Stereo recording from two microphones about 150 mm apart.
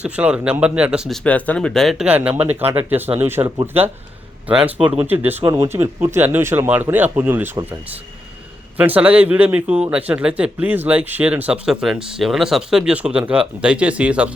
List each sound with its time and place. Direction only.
0.0 s speech: 10° right (ahead or behind)
4.4 s speech: 10° right (ahead or behind)
8.8 s speech: 10° right (ahead or behind)